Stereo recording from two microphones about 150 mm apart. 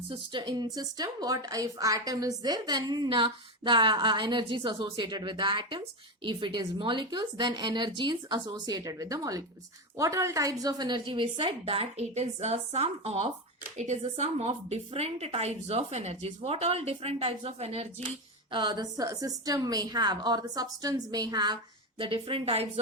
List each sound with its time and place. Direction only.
0.1 s a woman's voice: 30° right (ahead or behind)
18.5 s a woman's voice: 30° right (ahead or behind)